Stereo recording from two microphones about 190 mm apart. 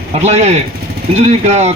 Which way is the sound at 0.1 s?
35° right (ahead or behind).